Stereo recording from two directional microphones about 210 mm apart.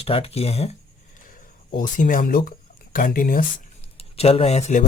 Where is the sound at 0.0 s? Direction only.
30° left (ahead or behind).